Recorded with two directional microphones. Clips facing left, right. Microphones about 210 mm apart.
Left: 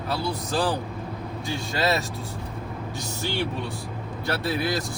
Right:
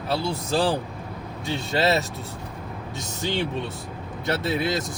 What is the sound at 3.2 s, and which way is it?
Speech, 20° right (ahead or behind).